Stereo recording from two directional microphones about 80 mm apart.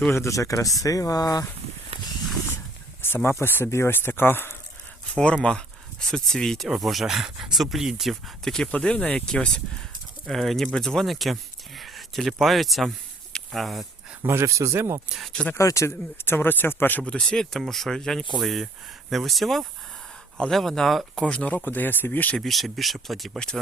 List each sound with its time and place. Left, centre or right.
0.1 s speech: left
3.2 s speech: left
5.1 s speech: centre
13.3 s a sound: centre
14.2 s speech: right
15.3 s speech: centre
15.5 s speech: left
17.0 s speech: centre; by 22.4 s left
22.4 s speech: centre